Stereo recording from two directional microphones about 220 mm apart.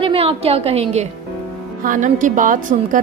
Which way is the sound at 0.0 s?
25° right (ahead or behind).